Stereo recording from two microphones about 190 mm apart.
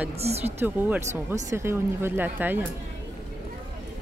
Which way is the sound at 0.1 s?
35° right (ahead or behind).